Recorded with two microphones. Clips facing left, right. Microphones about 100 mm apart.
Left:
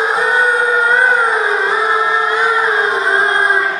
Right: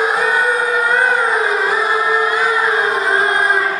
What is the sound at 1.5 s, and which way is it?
Music, 30° left (ahead or behind).